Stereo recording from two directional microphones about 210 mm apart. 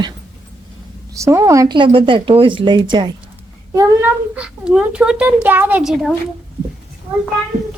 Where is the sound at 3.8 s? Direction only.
5° right (ahead or behind).